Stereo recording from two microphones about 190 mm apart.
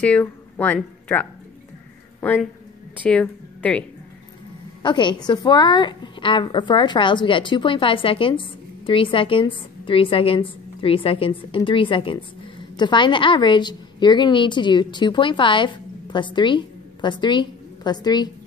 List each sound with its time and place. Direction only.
0.0 s a woman's voice: 5° left (ahead or behind)
2.1 s a sound: 10° left (ahead or behind)
3.0 s a woman's voice: 5° left (ahead or behind)
4.8 s a woman's voice: 25° left (ahead or behind)